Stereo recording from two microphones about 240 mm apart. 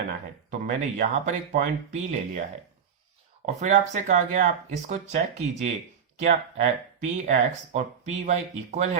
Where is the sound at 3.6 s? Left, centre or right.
Right.